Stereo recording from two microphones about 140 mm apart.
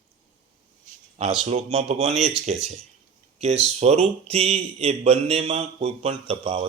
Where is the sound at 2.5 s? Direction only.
55° right (ahead or behind).